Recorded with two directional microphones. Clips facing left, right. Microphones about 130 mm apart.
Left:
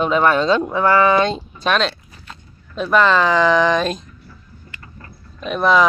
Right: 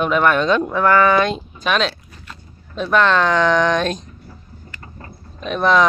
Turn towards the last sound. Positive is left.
turn(degrees=5)  # may be behind; listen again after turning